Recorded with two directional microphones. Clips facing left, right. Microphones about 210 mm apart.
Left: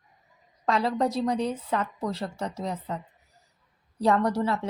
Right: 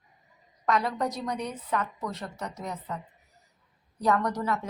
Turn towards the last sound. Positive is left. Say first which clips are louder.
# left 4 dB
turn(degrees=30)  # may be behind; listen again after turning